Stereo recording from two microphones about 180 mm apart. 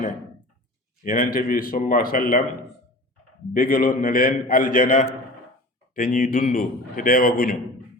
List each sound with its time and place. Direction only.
1.0 s a man's voice: 45° left (ahead or behind)
3.5 s a man's voice: 55° left (ahead or behind)